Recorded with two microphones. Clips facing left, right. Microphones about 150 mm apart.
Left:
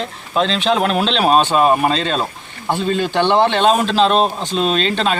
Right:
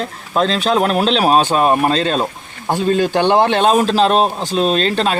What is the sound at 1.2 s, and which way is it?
Speech, 10° right (ahead or behind).